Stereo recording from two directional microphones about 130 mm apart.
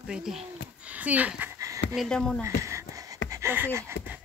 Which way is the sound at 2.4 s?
25° right (ahead or behind).